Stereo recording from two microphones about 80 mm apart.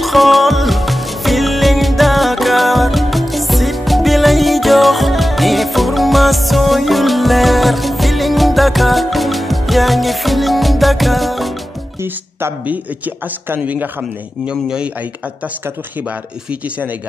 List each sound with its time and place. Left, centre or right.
0.0 s music: centre
12.0 s speech: right
12.6 s speech: centre
14.5 s speech: centre